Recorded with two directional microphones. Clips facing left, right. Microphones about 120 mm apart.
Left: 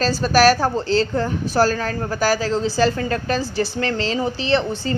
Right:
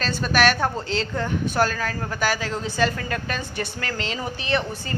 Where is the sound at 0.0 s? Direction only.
35° left (ahead or behind).